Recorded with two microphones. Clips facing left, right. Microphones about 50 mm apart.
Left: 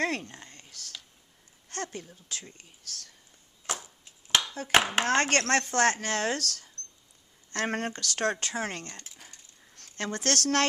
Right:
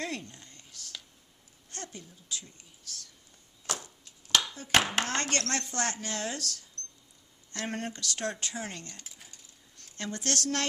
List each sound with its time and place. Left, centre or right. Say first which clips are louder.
0.0 s speech: left 7 dB; left
3.8 s a sound: even; centre
4.7 s speech: left 2 dB; centre
5.0 s a woman's voice: left 7 dB; left